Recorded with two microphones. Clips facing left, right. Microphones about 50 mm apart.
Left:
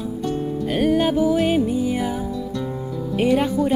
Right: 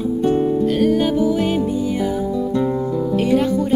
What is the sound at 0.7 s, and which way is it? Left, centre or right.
Music, centre.